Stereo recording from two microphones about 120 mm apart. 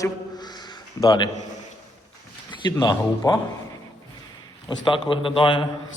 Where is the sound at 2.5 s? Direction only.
40° left (ahead or behind).